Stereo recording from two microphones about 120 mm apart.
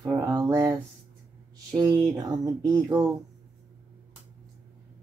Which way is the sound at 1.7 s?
30° right (ahead or behind).